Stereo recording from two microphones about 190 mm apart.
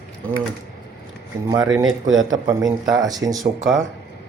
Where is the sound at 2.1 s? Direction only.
20° right (ahead or behind).